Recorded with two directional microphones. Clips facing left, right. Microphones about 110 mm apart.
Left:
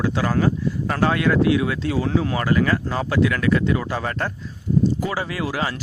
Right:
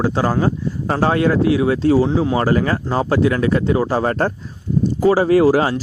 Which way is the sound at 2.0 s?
25° right (ahead or behind).